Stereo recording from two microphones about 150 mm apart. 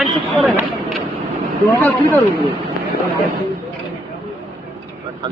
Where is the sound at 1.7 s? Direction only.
10° left (ahead or behind).